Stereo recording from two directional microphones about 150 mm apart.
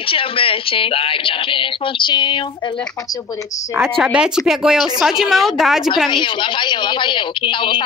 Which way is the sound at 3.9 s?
5° right (ahead or behind).